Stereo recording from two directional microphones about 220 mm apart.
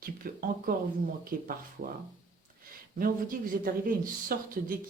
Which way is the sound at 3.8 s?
40° right (ahead or behind).